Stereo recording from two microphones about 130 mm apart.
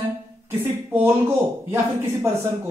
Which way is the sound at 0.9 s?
20° right (ahead or behind).